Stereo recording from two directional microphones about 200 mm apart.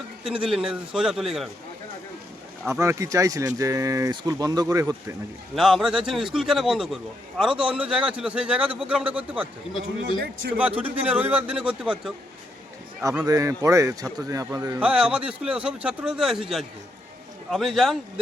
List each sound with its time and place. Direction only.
0.3 s a man's voice: 5° right (ahead or behind)
2.6 s a man's voice: 15° right (ahead or behind)
5.5 s a man's voice: centre (ahead or behind)
10.6 s a man's voice: 10° right (ahead or behind)
13.0 s a man's voice: 15° right (ahead or behind); by 17.9 s centre (ahead or behind)